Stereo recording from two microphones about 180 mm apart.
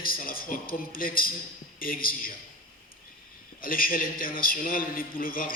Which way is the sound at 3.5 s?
50° left (ahead or behind).